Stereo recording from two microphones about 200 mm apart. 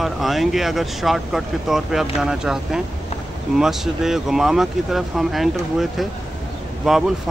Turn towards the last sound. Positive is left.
turn(degrees=0)  # may be behind; listen again after turning